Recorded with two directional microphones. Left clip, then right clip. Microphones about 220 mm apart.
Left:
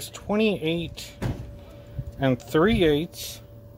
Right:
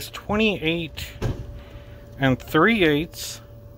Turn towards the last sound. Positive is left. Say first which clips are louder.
# right 1 dB
turn(degrees=0)  # may be behind; listen again after turning